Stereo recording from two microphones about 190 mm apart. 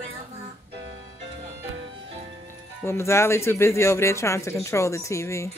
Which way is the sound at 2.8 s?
15° left (ahead or behind).